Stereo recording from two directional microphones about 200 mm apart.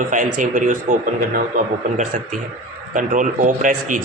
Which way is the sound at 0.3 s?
40° right (ahead or behind).